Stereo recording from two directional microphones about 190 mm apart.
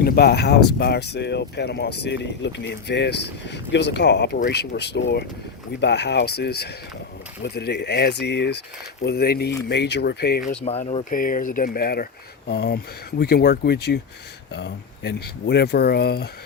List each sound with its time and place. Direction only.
0.0 s speech: 55° left (ahead or behind)
10.6 s speech: 35° left (ahead or behind)
11.1 s speech: 45° left (ahead or behind)